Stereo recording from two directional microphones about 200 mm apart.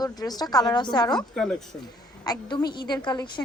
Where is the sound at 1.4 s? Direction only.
Centre (ahead or behind).